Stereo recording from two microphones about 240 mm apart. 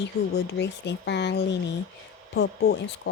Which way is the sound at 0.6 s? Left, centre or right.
Left.